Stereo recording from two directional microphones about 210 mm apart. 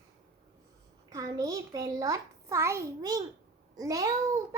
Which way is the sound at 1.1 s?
15° right (ahead or behind).